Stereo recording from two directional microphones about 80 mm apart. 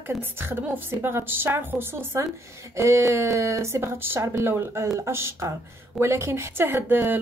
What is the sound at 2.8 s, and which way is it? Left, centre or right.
A woman's voice, right.